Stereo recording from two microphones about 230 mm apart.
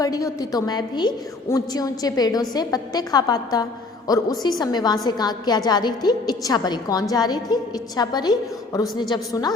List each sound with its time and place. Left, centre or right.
0.0 s a woman's voice: centre